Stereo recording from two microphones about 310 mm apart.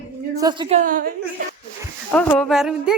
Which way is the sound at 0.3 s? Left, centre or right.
Centre.